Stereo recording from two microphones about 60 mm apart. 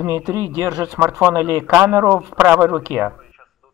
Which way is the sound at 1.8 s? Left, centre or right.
Right.